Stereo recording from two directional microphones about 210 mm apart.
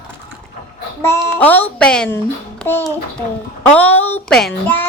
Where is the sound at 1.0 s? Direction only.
10° left (ahead or behind).